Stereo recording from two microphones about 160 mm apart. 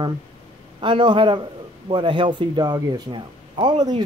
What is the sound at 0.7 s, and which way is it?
Speech, 30° right (ahead or behind).